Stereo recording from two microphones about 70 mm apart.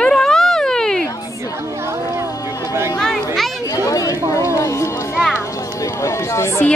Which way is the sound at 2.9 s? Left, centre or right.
Centre.